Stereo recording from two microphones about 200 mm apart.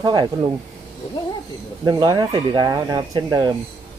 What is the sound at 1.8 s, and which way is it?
Speech, 20° right (ahead or behind).